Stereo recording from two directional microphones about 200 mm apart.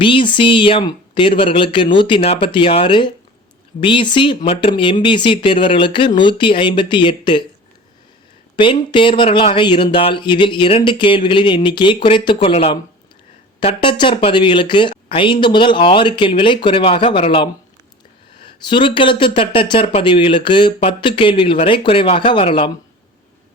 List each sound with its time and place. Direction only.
0.0 s speech: 25° left (ahead or behind)
8.5 s speech: 25° left (ahead or behind)